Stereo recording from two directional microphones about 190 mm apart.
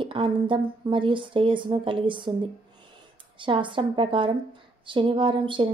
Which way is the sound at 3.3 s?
25° right (ahead or behind).